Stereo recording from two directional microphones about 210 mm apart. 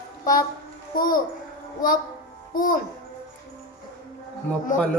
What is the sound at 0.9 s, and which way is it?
Speech, 45° left (ahead or behind).